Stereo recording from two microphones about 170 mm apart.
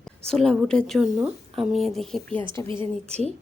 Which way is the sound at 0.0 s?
5° left (ahead or behind).